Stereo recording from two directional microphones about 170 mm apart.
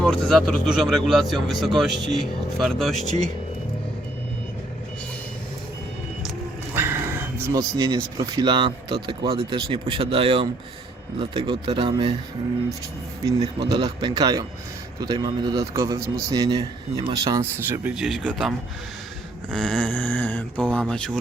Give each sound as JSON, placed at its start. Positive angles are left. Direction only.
{"t": 0.0, "sound": "speech", "side_deg": 5}
{"t": 6.7, "sound": "speech", "side_deg": -15}
{"t": 13.2, "sound": "speech", "side_deg": -25}
{"t": 17.7, "sound": "speech", "side_deg": -5}
{"t": 19.5, "sound": "a sound", "side_deg": 5}
{"t": 20.7, "sound": "speech", "side_deg": 5}